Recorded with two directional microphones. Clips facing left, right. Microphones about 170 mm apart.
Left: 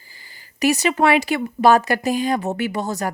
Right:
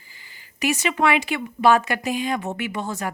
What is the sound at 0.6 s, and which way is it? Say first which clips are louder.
Speech: left 4 dB; 40° left (ahead or behind).